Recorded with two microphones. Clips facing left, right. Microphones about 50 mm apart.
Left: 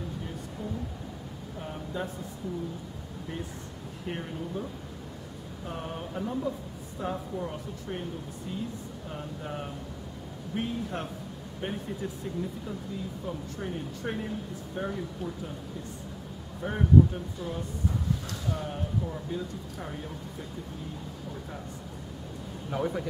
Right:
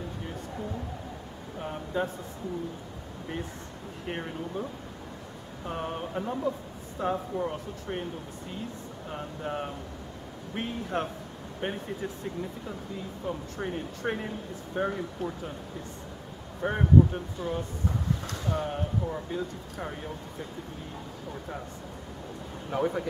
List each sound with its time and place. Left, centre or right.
1.6 s a sound: centre
4.1 s speech: centre
5.7 s speech: right
9.1 s speech: right
13.3 s speech: right
16.6 s speech: right
22.7 s speech: centre